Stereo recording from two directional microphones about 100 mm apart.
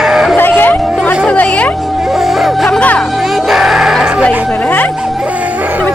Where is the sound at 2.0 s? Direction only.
5° right (ahead or behind).